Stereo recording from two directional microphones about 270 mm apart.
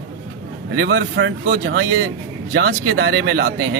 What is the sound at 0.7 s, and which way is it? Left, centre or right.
Speech, right.